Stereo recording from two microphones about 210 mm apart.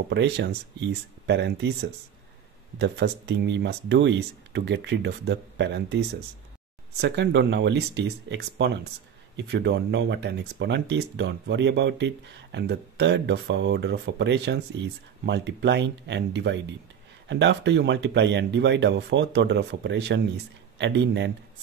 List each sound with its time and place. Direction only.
0.1 s speech: 55° right (ahead or behind)